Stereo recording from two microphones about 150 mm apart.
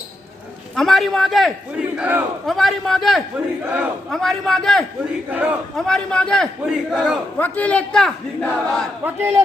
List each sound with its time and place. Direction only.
0.8 s speech: centre (ahead or behind)
2.5 s speech: centre (ahead or behind)
3.6 s a man's voice: 10° right (ahead or behind)
4.1 s speech: centre (ahead or behind)
5.3 s a man's voice: 10° right (ahead or behind)
5.7 s speech: 5° left (ahead or behind)
7.3 s speech: 10° left (ahead or behind)
9.0 s a man's voice: 15° right (ahead or behind)